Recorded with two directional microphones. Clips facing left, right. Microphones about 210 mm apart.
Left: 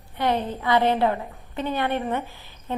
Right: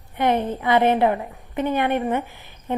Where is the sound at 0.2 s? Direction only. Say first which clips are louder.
Right 3 dB; 20° right (ahead or behind).